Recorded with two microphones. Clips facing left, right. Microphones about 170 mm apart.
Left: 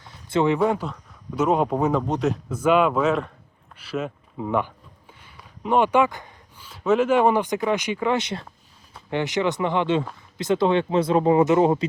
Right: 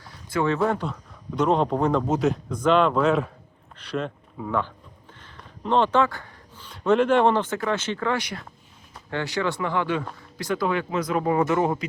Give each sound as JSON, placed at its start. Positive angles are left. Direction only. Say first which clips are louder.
{"t": 0.0, "sound": "speech", "louder": "left 3 dB", "side_deg": 25}
{"t": 4.4, "sound": "speech", "louder": "left 3 dB", "side_deg": 20}
{"t": 5.2, "sound": "a sound", "louder": "left 1 dB", "side_deg": 10}
{"t": 6.7, "sound": "speech", "louder": "even", "side_deg": 5}